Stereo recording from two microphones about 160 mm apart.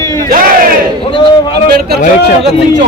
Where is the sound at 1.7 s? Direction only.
75° right (ahead or behind).